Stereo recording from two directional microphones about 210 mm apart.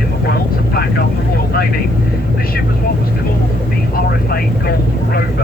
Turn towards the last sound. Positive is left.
turn(degrees=45)  # may be behind; listen again after turning